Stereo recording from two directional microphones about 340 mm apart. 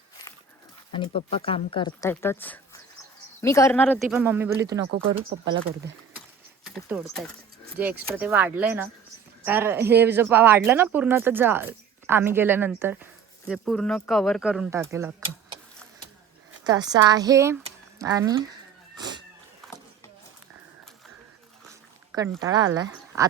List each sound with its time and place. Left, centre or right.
0.9 s speech: centre
5.3 s speech: right
6.7 s speech: centre
16.6 s speech: centre
18.9 s a sound: centre
19.6 s vehicle: centre
22.1 s speech: centre